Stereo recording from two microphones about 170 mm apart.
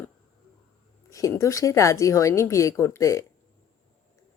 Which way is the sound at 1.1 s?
20° left (ahead or behind).